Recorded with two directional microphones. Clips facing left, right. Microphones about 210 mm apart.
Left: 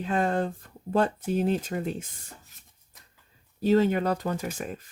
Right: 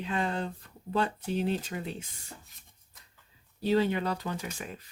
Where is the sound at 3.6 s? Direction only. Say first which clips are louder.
Left 5 dB; 45° left (ahead or behind).